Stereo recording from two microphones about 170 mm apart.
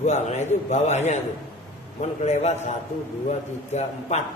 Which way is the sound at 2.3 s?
45° left (ahead or behind).